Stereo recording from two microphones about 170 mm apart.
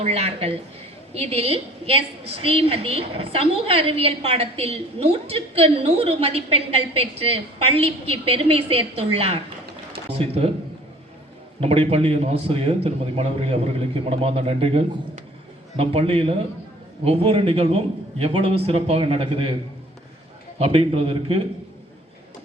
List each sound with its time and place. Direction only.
0.0 s a woman's voice: 35° right (ahead or behind)
11.6 s a woman's voice: 35° right (ahead or behind)
20.6 s a woman's voice: 35° right (ahead or behind)